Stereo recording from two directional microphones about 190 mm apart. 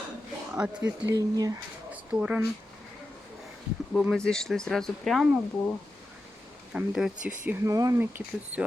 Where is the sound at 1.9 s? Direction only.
5° right (ahead or behind).